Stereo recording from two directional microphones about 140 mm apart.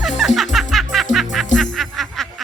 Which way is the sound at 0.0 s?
Centre (ahead or behind).